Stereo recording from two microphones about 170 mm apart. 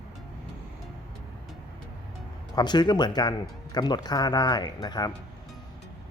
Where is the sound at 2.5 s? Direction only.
25° left (ahead or behind).